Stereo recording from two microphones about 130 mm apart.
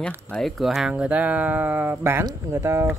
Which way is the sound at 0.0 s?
5° left (ahead or behind).